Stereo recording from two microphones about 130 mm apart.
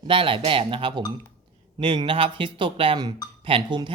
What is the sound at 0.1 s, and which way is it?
Speech, 45° right (ahead or behind).